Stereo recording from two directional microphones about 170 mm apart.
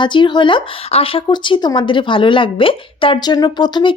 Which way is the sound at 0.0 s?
30° left (ahead or behind).